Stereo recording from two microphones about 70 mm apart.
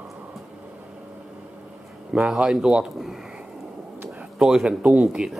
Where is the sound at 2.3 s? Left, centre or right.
Centre.